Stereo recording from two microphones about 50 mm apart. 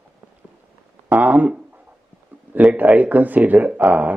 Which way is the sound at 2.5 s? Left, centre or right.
Right.